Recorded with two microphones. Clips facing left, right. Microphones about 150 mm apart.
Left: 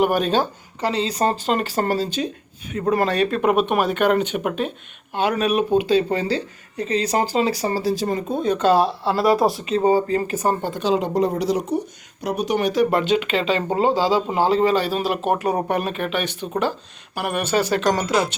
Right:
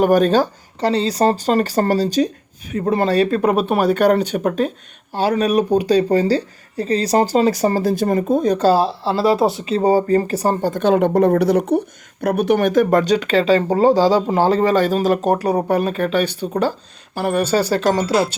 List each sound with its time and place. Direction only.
0.0 s speech: 45° right (ahead or behind)